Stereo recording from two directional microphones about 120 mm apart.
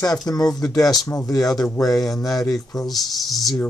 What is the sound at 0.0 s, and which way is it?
Speech, 30° left (ahead or behind).